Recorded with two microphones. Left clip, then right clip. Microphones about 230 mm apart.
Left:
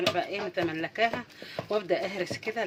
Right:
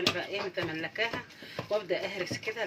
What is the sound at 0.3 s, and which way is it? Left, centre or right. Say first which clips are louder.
Speech: left 3 dB; left.